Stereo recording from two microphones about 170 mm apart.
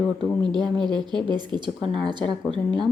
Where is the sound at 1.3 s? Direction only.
25° right (ahead or behind).